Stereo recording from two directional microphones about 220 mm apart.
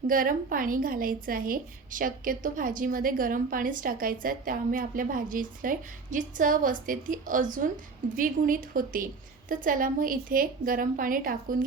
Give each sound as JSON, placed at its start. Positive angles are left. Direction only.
{"t": 0.1, "sound": "a woman's voice", "side_deg": -40}